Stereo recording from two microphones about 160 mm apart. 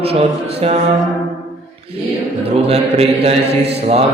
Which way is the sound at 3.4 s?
90° right.